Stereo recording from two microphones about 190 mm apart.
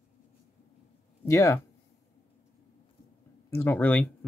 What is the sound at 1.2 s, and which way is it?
Speech, 15° left (ahead or behind).